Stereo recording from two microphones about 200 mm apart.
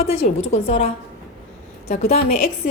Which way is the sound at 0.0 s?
30° left (ahead or behind).